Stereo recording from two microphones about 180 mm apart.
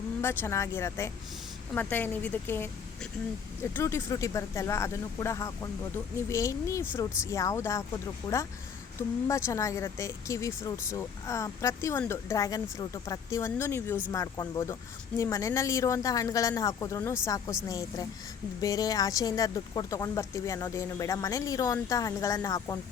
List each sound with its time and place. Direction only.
0.2 s speech: 15° left (ahead or behind)